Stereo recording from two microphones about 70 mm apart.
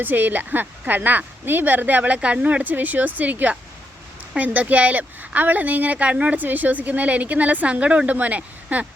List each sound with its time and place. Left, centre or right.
0.0 s speech: right